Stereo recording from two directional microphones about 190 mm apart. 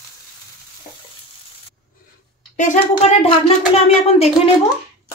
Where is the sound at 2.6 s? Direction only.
35° left (ahead or behind).